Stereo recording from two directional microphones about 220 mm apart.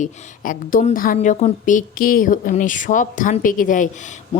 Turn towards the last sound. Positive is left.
turn(degrees=35)  # may be behind; listen again after turning